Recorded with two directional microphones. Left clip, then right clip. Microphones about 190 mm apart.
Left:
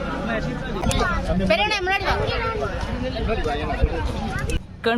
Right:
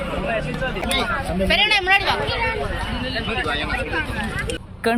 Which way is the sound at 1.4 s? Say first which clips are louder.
Right 4 dB; 50° left (ahead or behind).